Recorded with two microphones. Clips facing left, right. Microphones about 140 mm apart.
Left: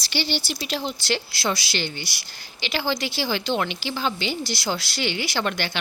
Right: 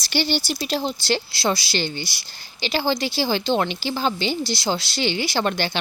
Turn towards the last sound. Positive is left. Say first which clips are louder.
# right 3 dB
turn(degrees=-30)  # may be behind; listen again after turning